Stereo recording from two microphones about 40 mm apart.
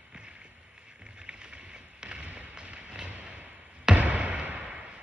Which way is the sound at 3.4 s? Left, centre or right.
Right.